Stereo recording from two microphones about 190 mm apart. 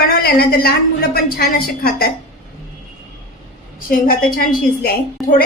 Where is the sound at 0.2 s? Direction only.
55° left (ahead or behind).